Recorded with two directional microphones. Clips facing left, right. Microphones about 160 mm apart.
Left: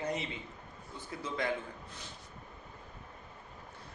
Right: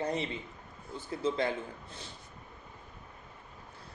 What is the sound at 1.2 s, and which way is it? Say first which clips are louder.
Speech: right 6 dB; 30° right (ahead or behind).